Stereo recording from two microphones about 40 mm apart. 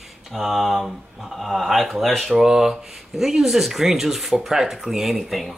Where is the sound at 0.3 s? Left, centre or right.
Centre.